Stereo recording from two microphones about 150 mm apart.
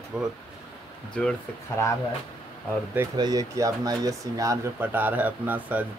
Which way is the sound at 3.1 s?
25° right (ahead or behind).